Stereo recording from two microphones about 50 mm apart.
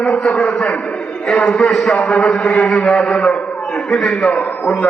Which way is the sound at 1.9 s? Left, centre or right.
Centre.